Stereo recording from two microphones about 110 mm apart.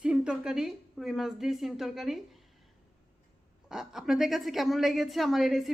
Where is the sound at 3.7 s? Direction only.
5° right (ahead or behind).